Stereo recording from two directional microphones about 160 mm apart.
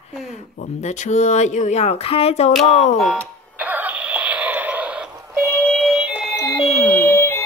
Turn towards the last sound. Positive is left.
turn(degrees=15)  # may be behind; listen again after turning